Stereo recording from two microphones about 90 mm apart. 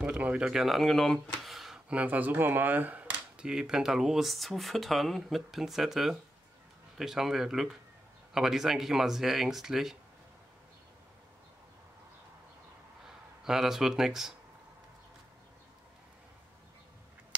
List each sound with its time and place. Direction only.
0.0 s a sound: 15° right (ahead or behind)
2.0 s speech: 20° right (ahead or behind)
13.0 s speech: 5° right (ahead or behind)